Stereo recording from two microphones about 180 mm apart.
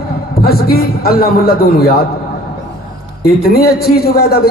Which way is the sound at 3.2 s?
60° left (ahead or behind).